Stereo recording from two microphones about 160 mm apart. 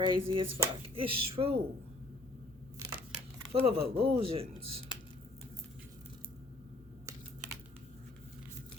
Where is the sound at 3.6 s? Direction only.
35° right (ahead or behind).